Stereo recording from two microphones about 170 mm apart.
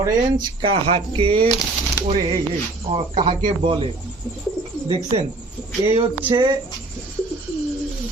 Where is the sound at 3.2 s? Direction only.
25° right (ahead or behind).